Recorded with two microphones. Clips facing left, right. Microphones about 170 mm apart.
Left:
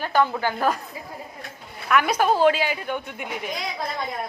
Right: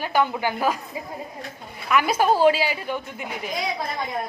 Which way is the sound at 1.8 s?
5° right (ahead or behind).